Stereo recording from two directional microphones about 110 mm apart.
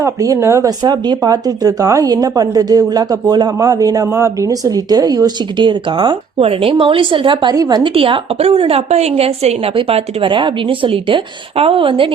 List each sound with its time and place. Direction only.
0.0 s speech: 30° right (ahead or behind); by 7.5 s 50° right (ahead or behind)
7.5 s speech: 35° right (ahead or behind)
7.9 s a woman's voice: 55° right (ahead or behind)